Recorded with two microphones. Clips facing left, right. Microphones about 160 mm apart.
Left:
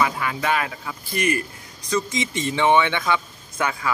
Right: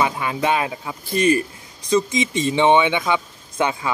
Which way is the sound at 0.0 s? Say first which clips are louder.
Right 2 dB; 20° right (ahead or behind).